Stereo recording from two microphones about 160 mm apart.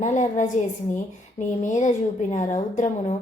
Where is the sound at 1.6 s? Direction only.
50° left (ahead or behind).